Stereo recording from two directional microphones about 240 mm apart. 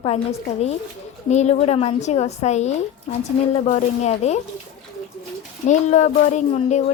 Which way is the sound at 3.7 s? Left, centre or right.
Left.